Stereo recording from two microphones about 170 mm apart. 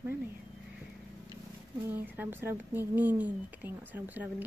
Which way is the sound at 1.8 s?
10° right (ahead or behind).